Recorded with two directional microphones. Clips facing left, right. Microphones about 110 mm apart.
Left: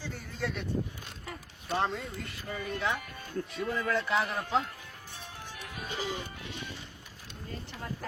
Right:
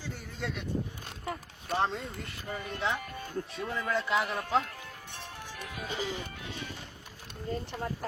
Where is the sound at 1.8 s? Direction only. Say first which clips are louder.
Right 1 dB; 25° right (ahead or behind).